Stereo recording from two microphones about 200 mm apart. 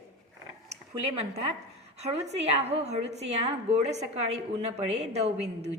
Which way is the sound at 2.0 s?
35° right (ahead or behind).